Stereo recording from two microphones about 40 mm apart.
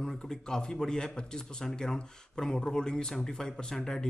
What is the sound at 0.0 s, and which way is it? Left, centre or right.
Speech, centre.